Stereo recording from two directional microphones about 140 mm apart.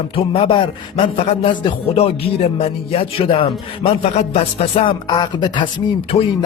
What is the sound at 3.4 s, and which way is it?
Speech, 40° left (ahead or behind).